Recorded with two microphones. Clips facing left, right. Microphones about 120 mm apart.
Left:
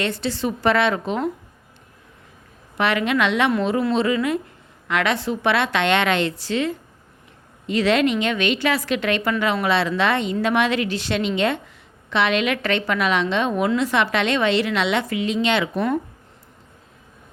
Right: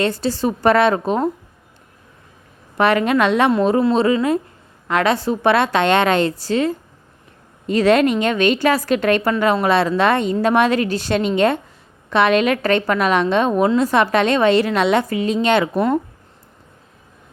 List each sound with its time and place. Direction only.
0.0 s a woman's voice: 40° right (ahead or behind)
2.7 s a woman's voice: 40° right (ahead or behind)